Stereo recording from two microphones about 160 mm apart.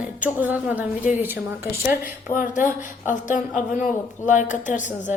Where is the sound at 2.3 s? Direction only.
55° left (ahead or behind).